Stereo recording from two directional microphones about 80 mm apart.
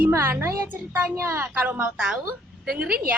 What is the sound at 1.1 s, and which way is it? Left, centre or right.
A woman's voice, right.